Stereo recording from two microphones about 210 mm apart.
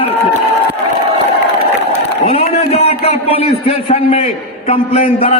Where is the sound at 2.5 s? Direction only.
30° left (ahead or behind).